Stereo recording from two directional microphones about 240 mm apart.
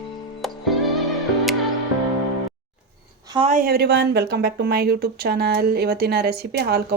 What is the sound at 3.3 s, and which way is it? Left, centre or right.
Speech, right.